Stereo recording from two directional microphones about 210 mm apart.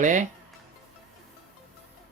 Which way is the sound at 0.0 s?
35° right (ahead or behind).